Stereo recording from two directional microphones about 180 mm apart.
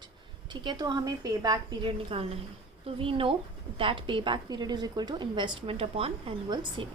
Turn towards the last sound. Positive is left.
turn(degrees=-30)  # may be behind; listen again after turning